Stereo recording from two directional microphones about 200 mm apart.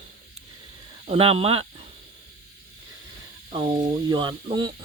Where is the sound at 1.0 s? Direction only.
30° right (ahead or behind).